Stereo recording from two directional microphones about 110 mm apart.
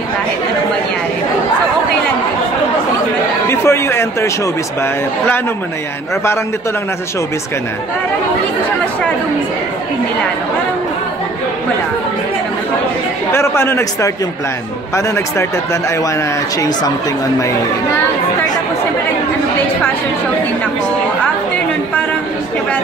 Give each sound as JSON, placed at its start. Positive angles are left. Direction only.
{"t": 3.4, "sound": "a man's voice", "side_deg": 25}
{"t": 13.3, "sound": "a man's voice", "side_deg": 20}